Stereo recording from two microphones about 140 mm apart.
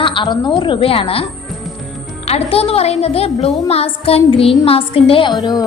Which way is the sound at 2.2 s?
45° left (ahead or behind).